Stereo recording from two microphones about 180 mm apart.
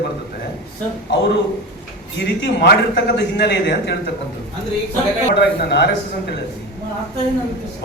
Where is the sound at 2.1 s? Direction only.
75° left (ahead or behind).